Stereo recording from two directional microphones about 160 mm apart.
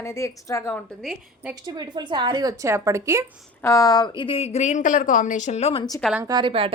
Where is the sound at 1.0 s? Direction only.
Centre (ahead or behind).